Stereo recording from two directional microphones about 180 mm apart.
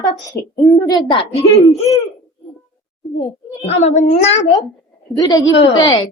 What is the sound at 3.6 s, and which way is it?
Speech, 35° left (ahead or behind).